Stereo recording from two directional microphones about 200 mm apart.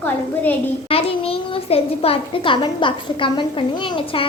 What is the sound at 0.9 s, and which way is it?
A child's voice, 30° left (ahead or behind).